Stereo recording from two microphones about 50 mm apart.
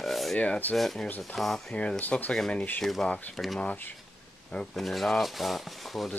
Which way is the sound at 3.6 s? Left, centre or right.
Left.